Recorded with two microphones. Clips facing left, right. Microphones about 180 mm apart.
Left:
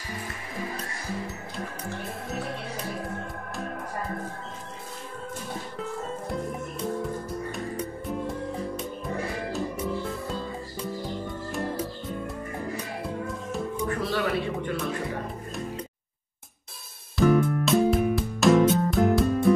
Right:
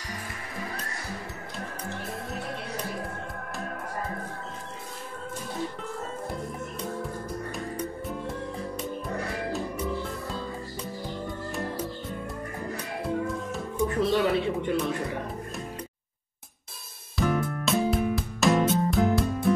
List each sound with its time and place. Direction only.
13.7 s music: 20° right (ahead or behind)
17.2 s music: centre (ahead or behind)